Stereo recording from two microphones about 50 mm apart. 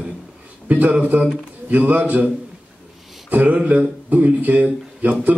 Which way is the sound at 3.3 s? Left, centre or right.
Right.